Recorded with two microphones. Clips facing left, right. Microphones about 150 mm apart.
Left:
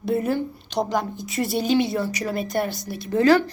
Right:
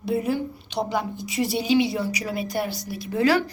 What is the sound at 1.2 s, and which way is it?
Speech, 50° left (ahead or behind).